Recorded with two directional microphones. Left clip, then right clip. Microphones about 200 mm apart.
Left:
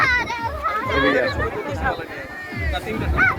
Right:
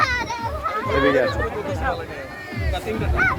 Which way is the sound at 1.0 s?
15° right (ahead or behind).